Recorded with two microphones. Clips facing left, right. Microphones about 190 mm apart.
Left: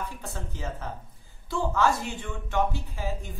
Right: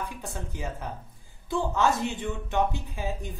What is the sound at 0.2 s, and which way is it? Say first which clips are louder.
A woman's voice: right 1 dB; 15° right (ahead or behind).